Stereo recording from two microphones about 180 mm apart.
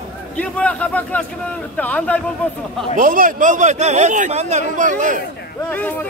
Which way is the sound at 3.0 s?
50° right (ahead or behind).